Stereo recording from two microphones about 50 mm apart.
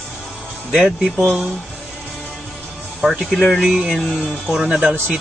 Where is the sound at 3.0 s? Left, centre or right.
Centre.